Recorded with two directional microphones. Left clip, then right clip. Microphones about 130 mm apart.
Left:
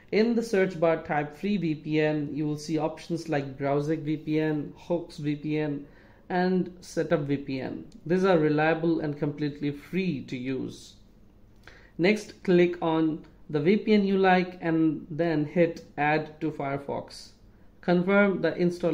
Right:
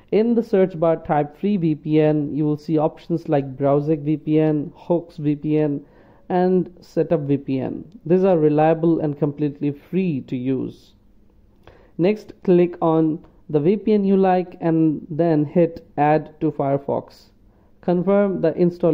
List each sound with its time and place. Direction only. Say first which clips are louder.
0.1 s a man's voice: right 7 dB; 45° right (ahead or behind)
6.5 s speech: right 8 dB; 35° right (ahead or behind)
12.0 s a man's voice: right 5 dB; 40° right (ahead or behind)